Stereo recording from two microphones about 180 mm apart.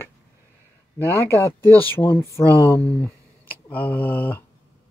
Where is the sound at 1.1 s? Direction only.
15° left (ahead or behind).